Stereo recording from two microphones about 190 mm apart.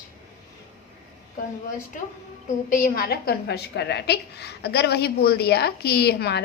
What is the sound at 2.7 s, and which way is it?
A woman's voice, 45° left (ahead or behind).